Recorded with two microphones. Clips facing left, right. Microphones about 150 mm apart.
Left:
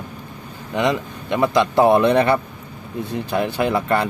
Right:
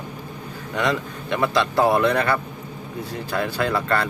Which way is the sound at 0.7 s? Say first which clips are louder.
Left 3 dB; 20° left (ahead or behind).